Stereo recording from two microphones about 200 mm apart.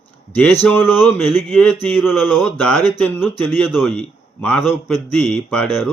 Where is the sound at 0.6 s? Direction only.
10° left (ahead or behind).